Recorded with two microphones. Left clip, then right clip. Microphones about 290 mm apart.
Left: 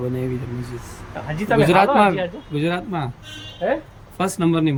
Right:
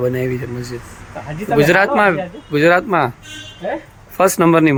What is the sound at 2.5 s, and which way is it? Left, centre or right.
Speech, right.